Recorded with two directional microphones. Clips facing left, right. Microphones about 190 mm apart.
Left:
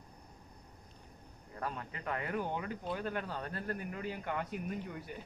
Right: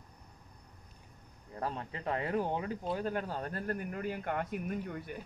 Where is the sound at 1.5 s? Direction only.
30° right (ahead or behind); by 5.1 s 55° right (ahead or behind).